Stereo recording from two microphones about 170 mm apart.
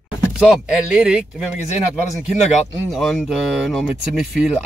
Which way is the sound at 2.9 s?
Centre (ahead or behind).